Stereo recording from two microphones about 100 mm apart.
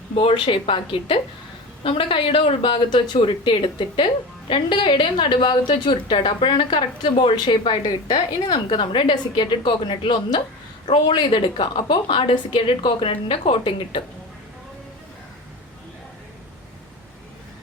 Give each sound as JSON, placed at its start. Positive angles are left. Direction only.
{"t": 0.2, "sound": "speech", "side_deg": 65}
{"t": 11.3, "sound": "speech", "side_deg": 60}